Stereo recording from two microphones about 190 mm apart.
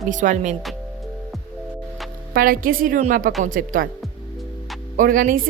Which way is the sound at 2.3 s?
50° right (ahead or behind).